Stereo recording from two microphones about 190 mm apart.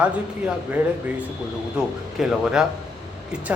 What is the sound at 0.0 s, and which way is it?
Speech, 5° right (ahead or behind).